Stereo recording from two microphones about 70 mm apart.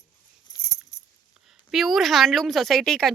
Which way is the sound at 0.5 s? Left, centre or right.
Left.